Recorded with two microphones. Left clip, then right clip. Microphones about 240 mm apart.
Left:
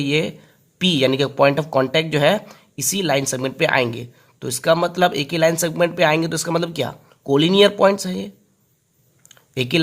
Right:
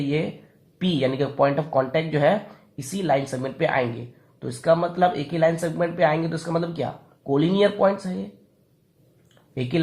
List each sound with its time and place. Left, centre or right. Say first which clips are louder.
0.8 s speech: left 6 dB; left
9.6 s speech: left 6 dB; left